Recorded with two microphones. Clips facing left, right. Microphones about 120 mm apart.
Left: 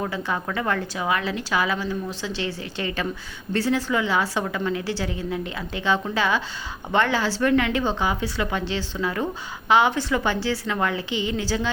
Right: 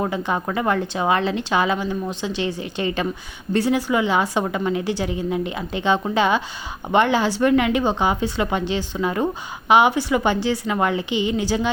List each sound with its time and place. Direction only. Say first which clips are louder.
0.1 s a woman's voice: right 4 dB; 20° right (ahead or behind)